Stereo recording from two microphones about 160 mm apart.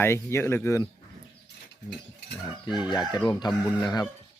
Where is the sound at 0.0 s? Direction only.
15° left (ahead or behind).